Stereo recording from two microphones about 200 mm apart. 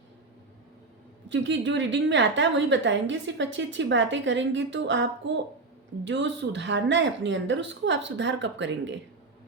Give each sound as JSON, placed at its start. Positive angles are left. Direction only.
{"t": 1.3, "sound": "a woman's voice", "side_deg": -65}
{"t": 6.1, "sound": "a woman's voice", "side_deg": -65}